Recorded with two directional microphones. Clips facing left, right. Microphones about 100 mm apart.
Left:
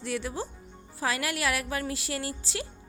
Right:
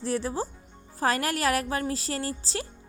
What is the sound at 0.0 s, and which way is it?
A woman's voice, 35° right (ahead or behind).